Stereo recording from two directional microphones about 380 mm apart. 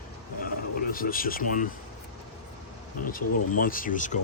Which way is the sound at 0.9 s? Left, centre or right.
Left.